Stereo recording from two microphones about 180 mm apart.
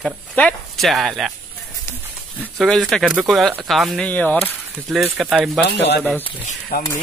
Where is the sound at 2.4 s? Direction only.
Centre (ahead or behind).